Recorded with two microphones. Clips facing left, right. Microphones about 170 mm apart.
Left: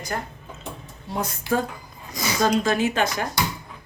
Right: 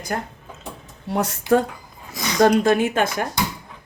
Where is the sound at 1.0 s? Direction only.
70° right (ahead or behind).